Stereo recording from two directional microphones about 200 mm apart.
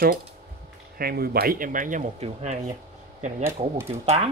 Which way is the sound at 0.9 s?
50° right (ahead or behind).